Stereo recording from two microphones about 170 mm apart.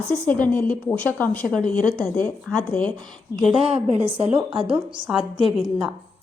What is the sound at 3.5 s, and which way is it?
Speech, 35° right (ahead or behind).